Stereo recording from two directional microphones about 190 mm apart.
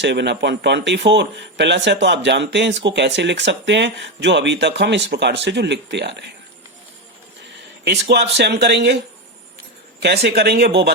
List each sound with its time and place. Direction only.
0.0 s a man's voice: 65° right (ahead or behind)
7.9 s a man's voice: 65° right (ahead or behind)
10.0 s a man's voice: 60° right (ahead or behind)